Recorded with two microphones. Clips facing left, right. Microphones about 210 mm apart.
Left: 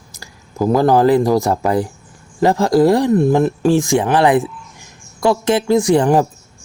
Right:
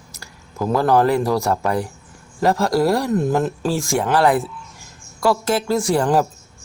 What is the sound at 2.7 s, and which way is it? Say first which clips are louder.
Speech: left 8 dB; 20° left (ahead or behind).